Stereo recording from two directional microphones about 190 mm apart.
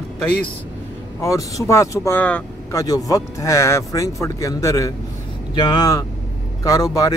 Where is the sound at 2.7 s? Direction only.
20° left (ahead or behind).